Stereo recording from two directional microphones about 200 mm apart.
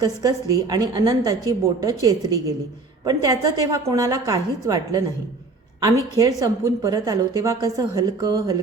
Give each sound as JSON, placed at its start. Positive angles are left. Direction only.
{"t": 0.0, "sound": "a woman's voice", "side_deg": -20}